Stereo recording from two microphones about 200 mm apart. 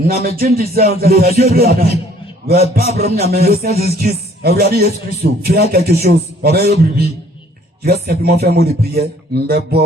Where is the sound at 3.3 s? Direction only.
50° right (ahead or behind).